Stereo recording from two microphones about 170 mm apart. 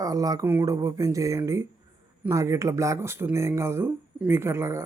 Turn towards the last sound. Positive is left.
turn(degrees=-15)  # may be behind; listen again after turning